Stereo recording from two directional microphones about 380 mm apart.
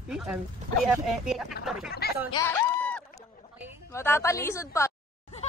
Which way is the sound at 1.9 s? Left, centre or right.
Left.